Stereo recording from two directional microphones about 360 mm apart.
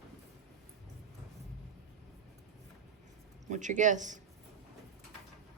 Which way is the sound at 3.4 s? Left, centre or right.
Centre.